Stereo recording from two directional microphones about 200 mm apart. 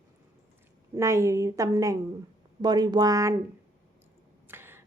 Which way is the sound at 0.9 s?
15° right (ahead or behind).